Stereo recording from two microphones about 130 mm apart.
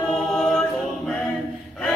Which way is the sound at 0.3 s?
5° left (ahead or behind).